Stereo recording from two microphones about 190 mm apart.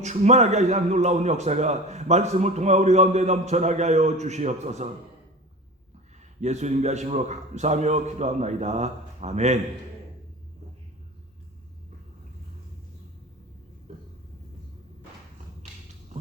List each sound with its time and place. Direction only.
0.0 s a man's voice: 35° right (ahead or behind)
6.4 s a man's voice: 35° right (ahead or behind)